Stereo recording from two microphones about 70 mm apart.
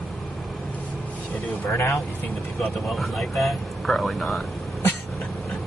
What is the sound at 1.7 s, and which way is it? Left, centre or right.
Speech, left.